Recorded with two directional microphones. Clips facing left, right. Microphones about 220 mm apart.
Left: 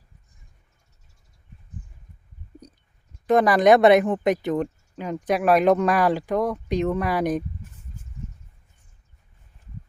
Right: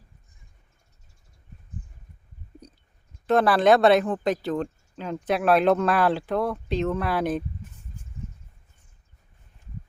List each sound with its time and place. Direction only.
3.2 s speech: 15° left (ahead or behind)